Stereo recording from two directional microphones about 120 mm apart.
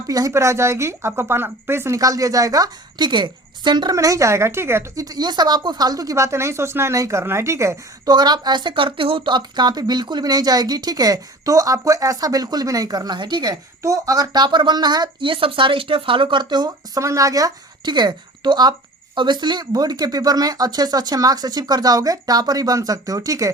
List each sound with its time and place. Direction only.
0.1 s speech: 30° right (ahead or behind)
3.9 s speech: 25° right (ahead or behind)
5.0 s speech: 35° right (ahead or behind)
8.1 s speech: 35° right (ahead or behind)